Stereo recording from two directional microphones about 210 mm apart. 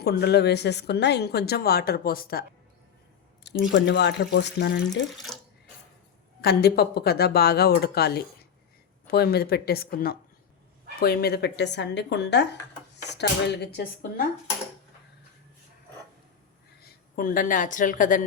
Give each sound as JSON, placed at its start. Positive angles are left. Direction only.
{"t": 0.0, "sound": "speech", "side_deg": 50}
{"t": 3.4, "sound": "speech", "side_deg": 60}
{"t": 5.1, "sound": "speech", "side_deg": 0}
{"t": 6.4, "sound": "speech", "side_deg": 50}
{"t": 16.8, "sound": "speech", "side_deg": 45}